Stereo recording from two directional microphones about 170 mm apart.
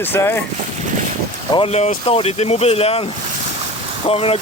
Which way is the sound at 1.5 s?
35° left (ahead or behind).